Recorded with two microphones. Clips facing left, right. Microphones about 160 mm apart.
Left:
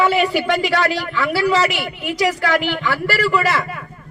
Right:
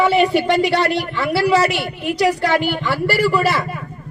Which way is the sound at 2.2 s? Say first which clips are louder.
Right 2 dB; 30° right (ahead or behind).